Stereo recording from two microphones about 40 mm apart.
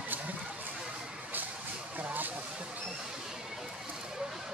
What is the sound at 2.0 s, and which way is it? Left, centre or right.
Vehicle, right.